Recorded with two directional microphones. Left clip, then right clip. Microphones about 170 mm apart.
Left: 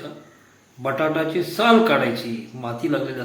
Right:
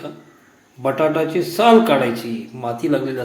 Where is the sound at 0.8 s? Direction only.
20° right (ahead or behind).